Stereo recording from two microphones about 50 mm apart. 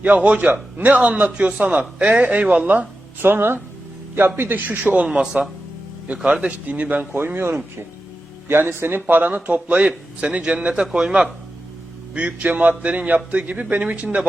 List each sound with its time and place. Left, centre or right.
0.0 s a man's voice: right
5.1 s speech: centre
6.5 s speech: right
7.1 s speech: right
10.9 s speech: centre
12.1 s a man's voice: right